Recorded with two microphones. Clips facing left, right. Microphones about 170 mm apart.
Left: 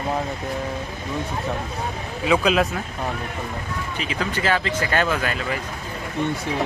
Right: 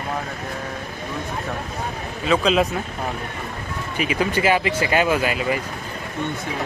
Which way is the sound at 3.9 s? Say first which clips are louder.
Right 6 dB; 10° right (ahead or behind).